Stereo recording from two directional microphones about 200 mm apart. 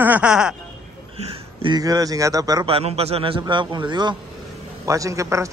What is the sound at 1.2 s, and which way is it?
A man's voice, 25° right (ahead or behind).